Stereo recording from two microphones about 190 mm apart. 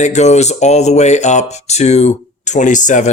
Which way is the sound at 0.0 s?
35° left (ahead or behind).